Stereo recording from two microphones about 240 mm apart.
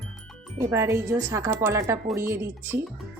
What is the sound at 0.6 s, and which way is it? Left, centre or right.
A woman's voice, centre.